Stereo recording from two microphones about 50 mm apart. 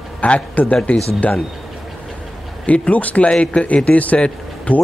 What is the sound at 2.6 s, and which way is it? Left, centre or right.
Speech, left.